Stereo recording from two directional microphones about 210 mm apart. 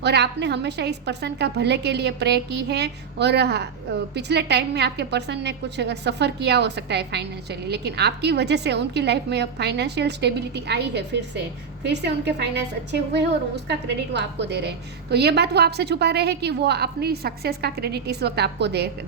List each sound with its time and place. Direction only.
0.0 s a woman's voice: 55° right (ahead or behind)